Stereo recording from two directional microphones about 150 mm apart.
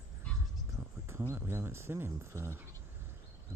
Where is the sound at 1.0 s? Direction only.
15° right (ahead or behind).